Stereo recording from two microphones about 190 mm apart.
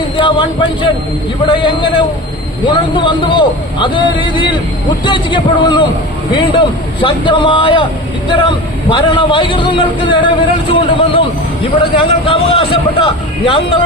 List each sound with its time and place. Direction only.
0.2 s a man's voice: 25° left (ahead or behind)